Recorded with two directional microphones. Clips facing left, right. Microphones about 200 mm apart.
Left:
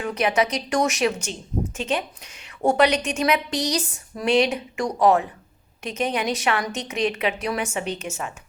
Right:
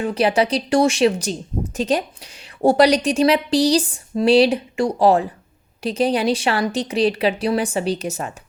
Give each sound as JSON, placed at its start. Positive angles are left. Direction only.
{"t": 0.0, "sound": "speech", "side_deg": -30}